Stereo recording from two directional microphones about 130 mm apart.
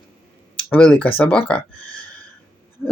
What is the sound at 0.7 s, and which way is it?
Speech, 10° left (ahead or behind).